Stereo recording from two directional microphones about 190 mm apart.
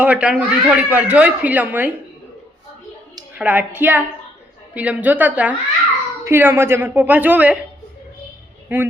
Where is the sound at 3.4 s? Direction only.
10° right (ahead or behind).